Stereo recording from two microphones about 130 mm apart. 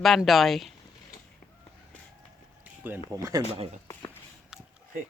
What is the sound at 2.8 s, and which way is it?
Speech, 15° right (ahead or behind).